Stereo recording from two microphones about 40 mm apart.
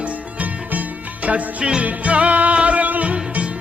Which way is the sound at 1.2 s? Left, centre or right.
Right.